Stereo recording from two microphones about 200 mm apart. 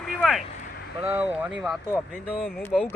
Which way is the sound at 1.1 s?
10° right (ahead or behind).